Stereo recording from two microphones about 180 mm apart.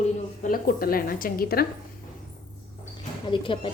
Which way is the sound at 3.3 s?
30° left (ahead or behind).